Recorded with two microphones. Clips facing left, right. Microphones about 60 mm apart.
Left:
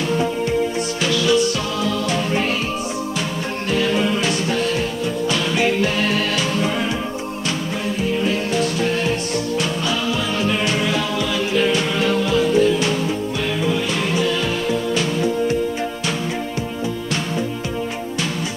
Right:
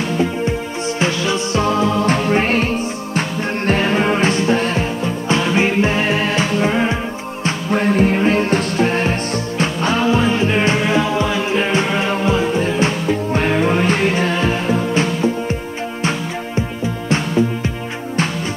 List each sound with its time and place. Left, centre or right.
0.2 s music: right
7.7 s music: right